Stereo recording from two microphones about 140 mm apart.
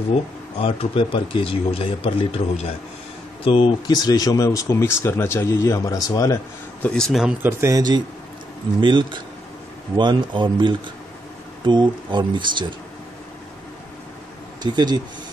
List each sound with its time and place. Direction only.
0.1 s speech: 40° left (ahead or behind); by 6.4 s 25° left (ahead or behind)
6.8 s speech: 5° left (ahead or behind)
7.4 s a man's voice: 25° right (ahead or behind)
14.6 s speech: 30° right (ahead or behind)